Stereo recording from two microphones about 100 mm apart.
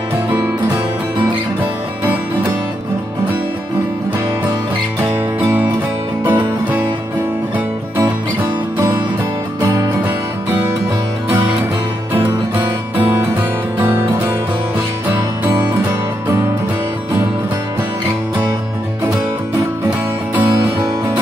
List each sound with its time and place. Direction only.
6.2 s music: 20° right (ahead or behind)
8.4 s music: 20° right (ahead or behind)
12.1 s music: 20° right (ahead or behind)